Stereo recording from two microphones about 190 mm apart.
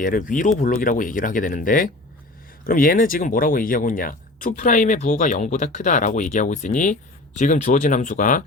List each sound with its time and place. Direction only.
0.0 s speech: 45° left (ahead or behind)